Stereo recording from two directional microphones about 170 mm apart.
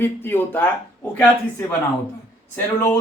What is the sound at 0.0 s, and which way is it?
Speech, 10° left (ahead or behind).